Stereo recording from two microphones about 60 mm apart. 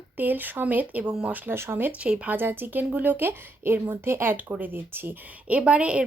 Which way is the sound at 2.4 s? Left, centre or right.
Right.